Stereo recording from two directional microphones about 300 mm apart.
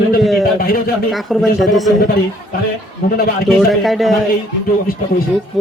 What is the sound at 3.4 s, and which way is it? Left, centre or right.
Speech, centre.